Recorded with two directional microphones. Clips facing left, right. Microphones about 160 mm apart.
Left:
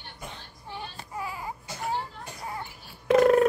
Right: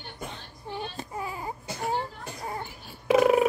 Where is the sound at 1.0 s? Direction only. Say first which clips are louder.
Right 1 dB; 25° right (ahead or behind).